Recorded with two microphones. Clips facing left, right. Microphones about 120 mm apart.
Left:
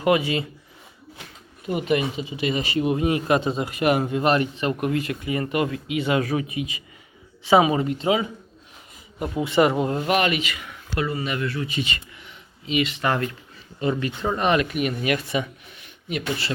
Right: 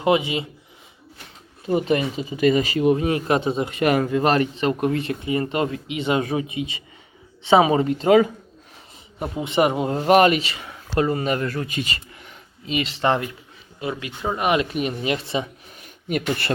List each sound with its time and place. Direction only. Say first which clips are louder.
0.0 s speech: right 1 dB; 20° right (ahead or behind)
1.6 s speech: right 2 dB; 30° right (ahead or behind)
4.1 s speech: right 2 dB; 40° right (ahead or behind)
9.1 s speech: left 1 dB; 25° right (ahead or behind)
9.9 s speech: right 6 dB; 35° right (ahead or behind)
12.6 s speech: right 1 dB; 35° right (ahead or behind)
13.7 s speech: left 4 dB; 5° right (ahead or behind)
14.6 s speech: even; 30° right (ahead or behind)
15.8 s a sound: right 4 dB; 50° right (ahead or behind)